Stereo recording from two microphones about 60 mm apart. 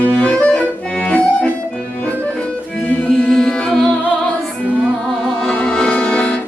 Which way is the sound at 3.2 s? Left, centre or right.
Centre.